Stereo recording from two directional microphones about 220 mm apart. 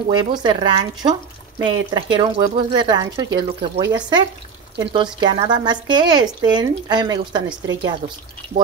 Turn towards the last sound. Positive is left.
turn(degrees=-20)  # may be behind; listen again after turning